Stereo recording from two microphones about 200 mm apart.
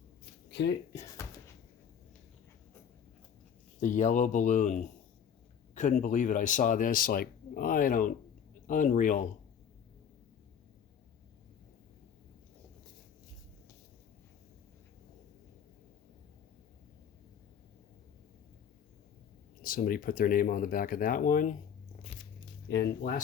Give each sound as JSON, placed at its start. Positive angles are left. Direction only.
{"t": 0.6, "sound": "speech", "side_deg": 60}
{"t": 3.8, "sound": "speech", "side_deg": 40}
{"t": 19.6, "sound": "speech", "side_deg": 45}
{"t": 22.7, "sound": "speech", "side_deg": 55}